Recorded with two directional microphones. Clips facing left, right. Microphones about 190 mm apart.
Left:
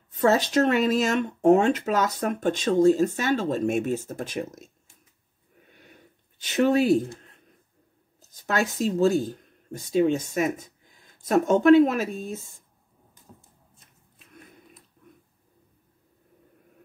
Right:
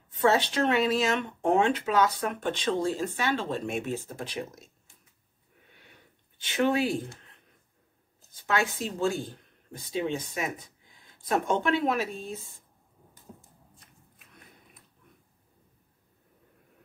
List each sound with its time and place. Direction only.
0.1 s speech: 45° left (ahead or behind)
6.4 s speech: 40° left (ahead or behind)
8.2 s speech: 40° left (ahead or behind)